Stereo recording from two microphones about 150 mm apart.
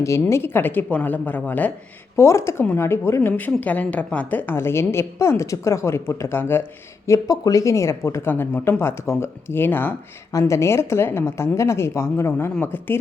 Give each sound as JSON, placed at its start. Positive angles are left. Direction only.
{"t": 0.0, "sound": "a woman's voice", "side_deg": 20}